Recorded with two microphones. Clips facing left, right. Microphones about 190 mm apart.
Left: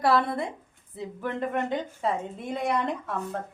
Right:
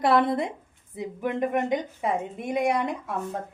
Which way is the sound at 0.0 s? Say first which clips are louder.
Right 2 dB; 20° right (ahead or behind).